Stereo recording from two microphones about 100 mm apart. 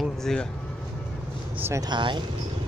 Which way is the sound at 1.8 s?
50° right (ahead or behind).